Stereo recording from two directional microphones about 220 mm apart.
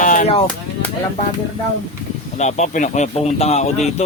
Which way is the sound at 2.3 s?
30° left (ahead or behind).